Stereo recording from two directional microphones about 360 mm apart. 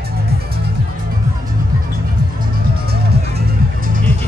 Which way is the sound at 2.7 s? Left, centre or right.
Right.